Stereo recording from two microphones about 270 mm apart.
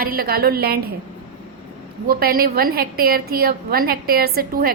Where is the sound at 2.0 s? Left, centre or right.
Right.